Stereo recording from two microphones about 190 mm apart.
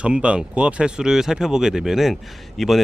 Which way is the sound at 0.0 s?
5° right (ahead or behind).